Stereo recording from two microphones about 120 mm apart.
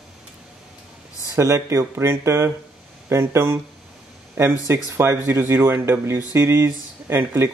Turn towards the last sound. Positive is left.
turn(degrees=-20)  # may be behind; listen again after turning